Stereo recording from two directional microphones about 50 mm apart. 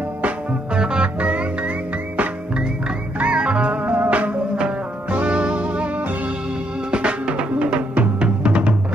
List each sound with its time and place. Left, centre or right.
0.7 s music: centre
3.2 s music: right